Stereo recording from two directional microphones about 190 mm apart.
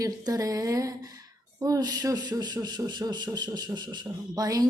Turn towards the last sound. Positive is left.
turn(degrees=-20)  # may be behind; listen again after turning